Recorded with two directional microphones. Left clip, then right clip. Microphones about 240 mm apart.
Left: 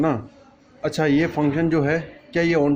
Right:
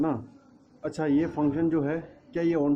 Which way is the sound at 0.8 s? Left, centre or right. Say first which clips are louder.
Left 7 dB; left.